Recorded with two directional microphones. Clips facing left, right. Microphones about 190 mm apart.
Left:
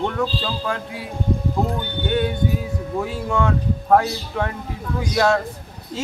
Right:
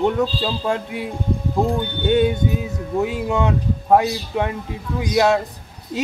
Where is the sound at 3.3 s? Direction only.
20° right (ahead or behind).